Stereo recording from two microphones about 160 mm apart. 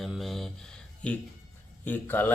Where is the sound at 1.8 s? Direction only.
10° left (ahead or behind).